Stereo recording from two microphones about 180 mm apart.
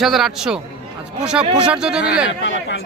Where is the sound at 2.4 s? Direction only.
85° left.